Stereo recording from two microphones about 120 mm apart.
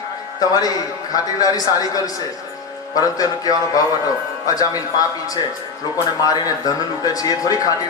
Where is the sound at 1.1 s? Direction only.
30° left (ahead or behind).